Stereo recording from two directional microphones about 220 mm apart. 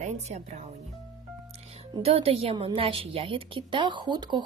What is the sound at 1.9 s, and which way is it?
A woman's voice, 25° right (ahead or behind).